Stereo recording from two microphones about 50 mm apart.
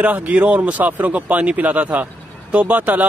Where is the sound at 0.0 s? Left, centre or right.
Right.